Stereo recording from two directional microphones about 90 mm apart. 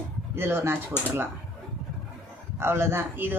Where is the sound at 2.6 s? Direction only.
30° right (ahead or behind).